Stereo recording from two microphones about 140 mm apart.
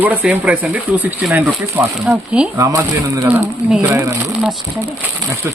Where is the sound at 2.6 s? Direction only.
25° right (ahead or behind).